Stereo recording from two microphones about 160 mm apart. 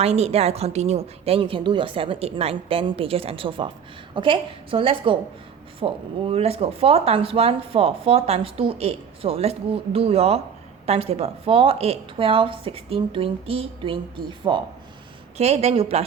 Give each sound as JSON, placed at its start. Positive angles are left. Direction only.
{"t": 0.0, "sound": "speech", "side_deg": -40}